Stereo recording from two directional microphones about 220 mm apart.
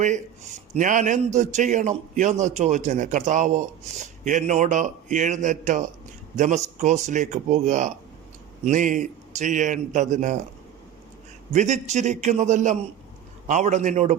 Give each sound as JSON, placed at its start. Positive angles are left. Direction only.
{"t": 0.0, "sound": "a man's voice", "side_deg": -35}
{"t": 11.5, "sound": "a man's voice", "side_deg": -30}